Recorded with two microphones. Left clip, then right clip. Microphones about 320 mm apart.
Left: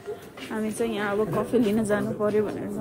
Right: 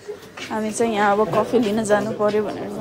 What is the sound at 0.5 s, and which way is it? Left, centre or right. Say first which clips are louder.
A woman's voice: right 7 dB; centre.